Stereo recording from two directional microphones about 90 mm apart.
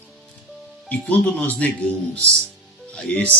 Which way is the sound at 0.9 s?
15° left (ahead or behind).